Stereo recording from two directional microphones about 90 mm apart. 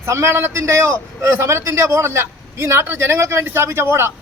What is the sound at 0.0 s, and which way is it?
A man's voice, 30° right (ahead or behind).